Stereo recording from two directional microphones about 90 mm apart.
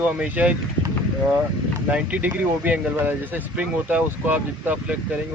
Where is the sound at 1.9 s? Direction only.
15° right (ahead or behind).